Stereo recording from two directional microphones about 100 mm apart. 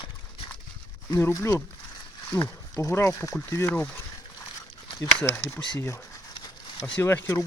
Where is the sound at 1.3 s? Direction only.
25° left (ahead or behind).